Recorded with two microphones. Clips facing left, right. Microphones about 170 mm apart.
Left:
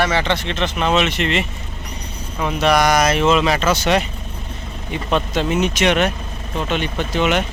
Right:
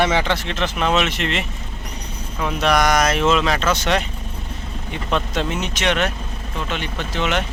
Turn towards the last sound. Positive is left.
turn(degrees=15)  # may be behind; listen again after turning